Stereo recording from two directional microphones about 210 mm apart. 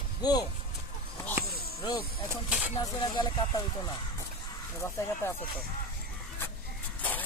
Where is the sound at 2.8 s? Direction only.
20° left (ahead or behind).